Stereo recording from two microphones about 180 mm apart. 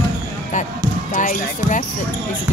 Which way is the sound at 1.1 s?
45° left (ahead or behind).